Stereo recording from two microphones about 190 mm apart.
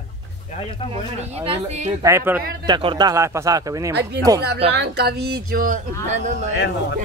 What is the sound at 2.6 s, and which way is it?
Speech, 25° right (ahead or behind).